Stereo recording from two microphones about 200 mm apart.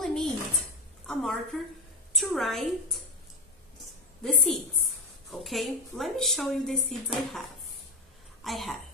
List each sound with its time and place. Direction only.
0.0 s a sound: centre (ahead or behind)
1.0 s a woman's voice: centre (ahead or behind)
4.2 s a woman's voice: centre (ahead or behind)
8.5 s a woman's voice: centre (ahead or behind)